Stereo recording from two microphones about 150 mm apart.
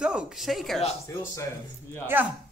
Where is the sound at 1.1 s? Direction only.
20° left (ahead or behind).